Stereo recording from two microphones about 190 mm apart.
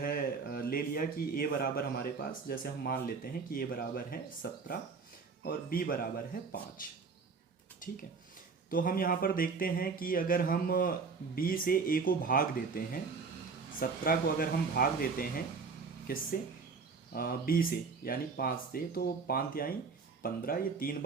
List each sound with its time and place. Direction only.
0.0 s speech: 50° left (ahead or behind)
5.4 s speech: 50° left (ahead or behind)